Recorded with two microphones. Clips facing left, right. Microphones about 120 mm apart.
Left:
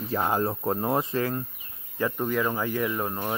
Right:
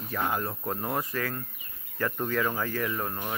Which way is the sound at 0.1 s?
30° left (ahead or behind).